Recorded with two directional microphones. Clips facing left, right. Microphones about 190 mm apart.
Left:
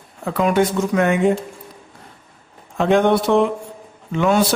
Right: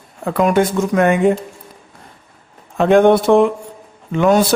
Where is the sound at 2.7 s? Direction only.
50° right (ahead or behind).